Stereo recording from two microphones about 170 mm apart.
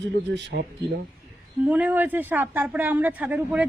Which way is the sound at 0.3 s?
90° right.